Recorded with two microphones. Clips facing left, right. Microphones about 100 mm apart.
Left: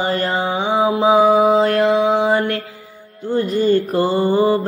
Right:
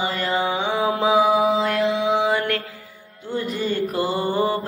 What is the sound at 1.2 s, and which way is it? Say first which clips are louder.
Mantra: left 6 dB; 40° left (ahead or behind).